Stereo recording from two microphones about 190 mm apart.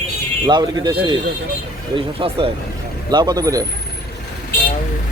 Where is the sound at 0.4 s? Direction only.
20° right (ahead or behind).